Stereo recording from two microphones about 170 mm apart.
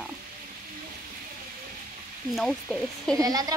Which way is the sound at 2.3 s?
Centre (ahead or behind).